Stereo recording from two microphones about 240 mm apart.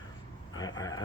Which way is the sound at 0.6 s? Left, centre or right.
Centre.